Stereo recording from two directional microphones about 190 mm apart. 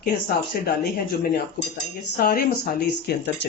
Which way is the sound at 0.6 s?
60° left (ahead or behind).